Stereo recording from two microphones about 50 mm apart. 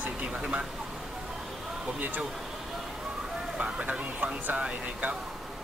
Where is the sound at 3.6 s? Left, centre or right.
Right.